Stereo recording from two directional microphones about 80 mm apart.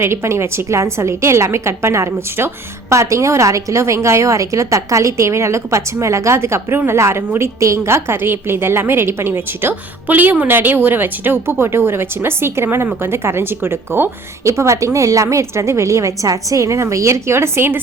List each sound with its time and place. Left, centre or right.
0.0 s a woman's voice: right